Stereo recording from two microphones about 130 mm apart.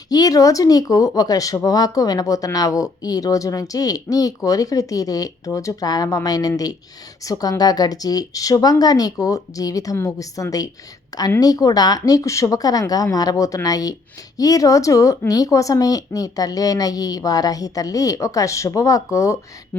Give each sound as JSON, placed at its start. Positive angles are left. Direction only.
{"t": 0.1, "sound": "speech", "side_deg": 30}